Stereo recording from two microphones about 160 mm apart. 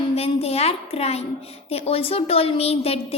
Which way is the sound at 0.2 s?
40° left (ahead or behind).